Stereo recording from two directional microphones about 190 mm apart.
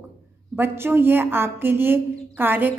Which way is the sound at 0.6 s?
10° right (ahead or behind).